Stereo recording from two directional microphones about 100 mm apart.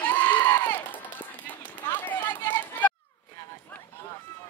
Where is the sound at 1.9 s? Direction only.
20° left (ahead or behind).